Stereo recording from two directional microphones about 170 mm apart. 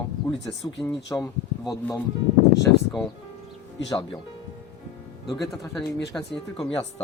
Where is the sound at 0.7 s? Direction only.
Centre (ahead or behind).